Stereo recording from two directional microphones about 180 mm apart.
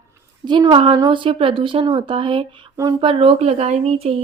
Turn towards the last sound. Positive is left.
turn(degrees=-35)  # may be behind; listen again after turning